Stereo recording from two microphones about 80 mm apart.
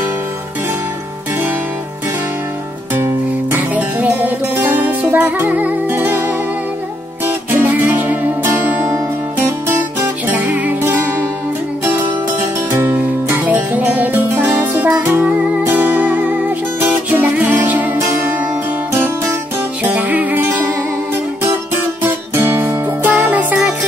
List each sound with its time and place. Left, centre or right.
3.5 s music: centre
7.5 s music: right
8.8 s music: right
10.5 s music: right
12.7 s music: right
14.9 s music: centre
15.1 s music: right
19.8 s music: right
22.3 s music: right